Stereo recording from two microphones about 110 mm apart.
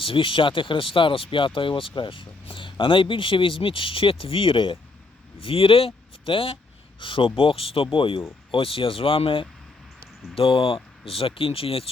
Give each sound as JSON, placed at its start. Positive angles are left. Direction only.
{"t": 0.0, "sound": "speech", "side_deg": 50}